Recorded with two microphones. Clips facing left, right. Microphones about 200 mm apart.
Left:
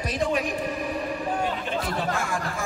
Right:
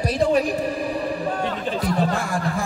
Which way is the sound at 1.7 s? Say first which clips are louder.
Right 5 dB; 35° right (ahead or behind).